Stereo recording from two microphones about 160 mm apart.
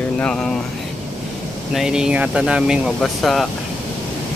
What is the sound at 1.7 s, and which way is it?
Speech, 5° right (ahead or behind).